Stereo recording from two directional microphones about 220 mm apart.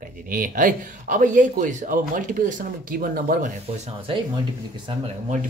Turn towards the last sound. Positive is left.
turn(degrees=-30)  # may be behind; listen again after turning